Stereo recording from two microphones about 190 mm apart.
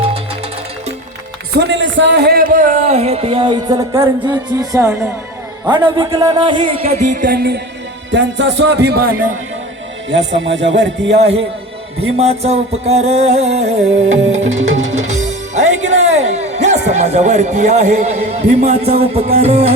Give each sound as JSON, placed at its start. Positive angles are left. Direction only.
{"t": 1.5, "sound": "speech", "side_deg": -65}
{"t": 8.1, "sound": "speech", "side_deg": -70}
{"t": 10.1, "sound": "a man's voice", "side_deg": -70}
{"t": 12.1, "sound": "music", "side_deg": -35}